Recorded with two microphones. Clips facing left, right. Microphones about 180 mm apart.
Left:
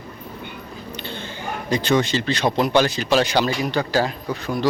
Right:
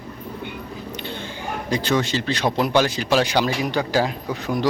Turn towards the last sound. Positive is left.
turn(degrees=-15)  # may be behind; listen again after turning